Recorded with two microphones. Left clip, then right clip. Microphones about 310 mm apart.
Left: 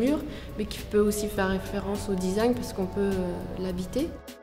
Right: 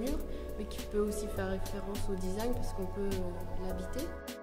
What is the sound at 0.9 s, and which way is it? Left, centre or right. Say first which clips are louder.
Speech: left 9 dB; left.